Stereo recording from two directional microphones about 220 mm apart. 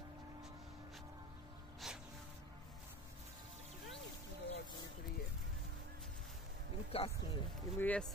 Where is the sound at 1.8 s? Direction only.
Centre (ahead or behind).